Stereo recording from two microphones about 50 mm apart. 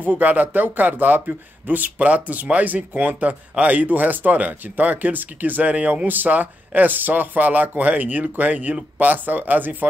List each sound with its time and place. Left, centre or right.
0.0 s a man's voice: right